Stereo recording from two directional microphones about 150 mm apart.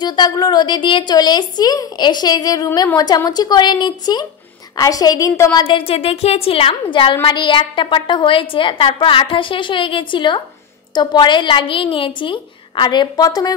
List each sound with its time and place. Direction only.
0.0 s a woman's voice: 30° left (ahead or behind)
5.6 s a woman's voice: 35° left (ahead or behind)